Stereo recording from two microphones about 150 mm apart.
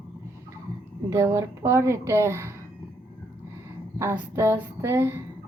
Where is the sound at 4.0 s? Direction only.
20° right (ahead or behind).